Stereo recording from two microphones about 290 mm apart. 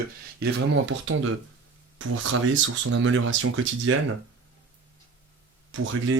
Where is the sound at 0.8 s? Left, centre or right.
Right.